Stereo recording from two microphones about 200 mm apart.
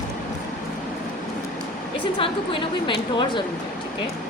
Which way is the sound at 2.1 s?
25° left (ahead or behind).